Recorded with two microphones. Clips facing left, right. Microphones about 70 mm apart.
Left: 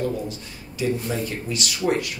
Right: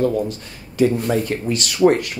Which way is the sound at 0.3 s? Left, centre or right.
Right.